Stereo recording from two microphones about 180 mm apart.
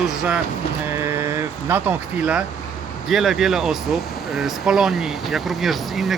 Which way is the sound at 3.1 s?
Centre (ahead or behind).